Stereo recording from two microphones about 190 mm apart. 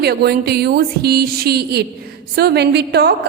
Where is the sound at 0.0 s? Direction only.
55° right (ahead or behind).